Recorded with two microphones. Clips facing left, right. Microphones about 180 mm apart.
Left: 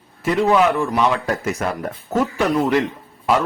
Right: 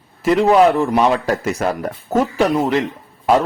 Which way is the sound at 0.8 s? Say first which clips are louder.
Right 3 dB; 35° right (ahead or behind).